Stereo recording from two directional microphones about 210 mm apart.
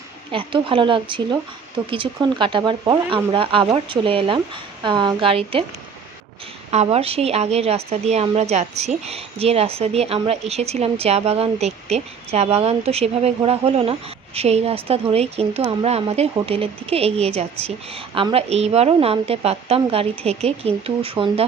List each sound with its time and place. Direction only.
0.3 s a woman's voice: 25° right (ahead or behind)
6.7 s a woman's voice: 30° right (ahead or behind)